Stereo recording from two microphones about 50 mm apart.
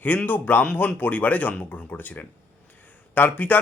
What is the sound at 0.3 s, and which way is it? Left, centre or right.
A man's voice, left.